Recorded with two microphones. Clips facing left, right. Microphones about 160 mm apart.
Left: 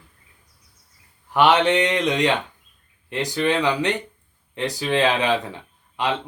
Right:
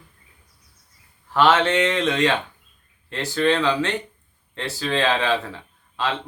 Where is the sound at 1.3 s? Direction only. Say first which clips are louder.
Left 1 dB; 15° left (ahead or behind).